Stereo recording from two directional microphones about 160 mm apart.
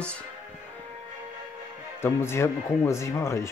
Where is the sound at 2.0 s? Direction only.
15° left (ahead or behind).